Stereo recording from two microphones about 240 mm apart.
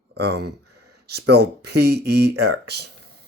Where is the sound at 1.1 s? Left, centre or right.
Right.